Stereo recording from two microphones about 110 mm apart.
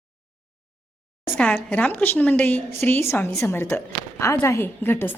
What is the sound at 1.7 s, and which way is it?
A woman's voice, 15° left (ahead or behind).